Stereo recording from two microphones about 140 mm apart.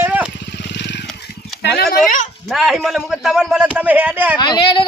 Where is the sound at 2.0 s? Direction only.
65° left (ahead or behind).